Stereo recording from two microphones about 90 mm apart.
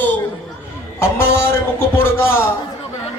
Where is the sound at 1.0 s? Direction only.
30° left (ahead or behind).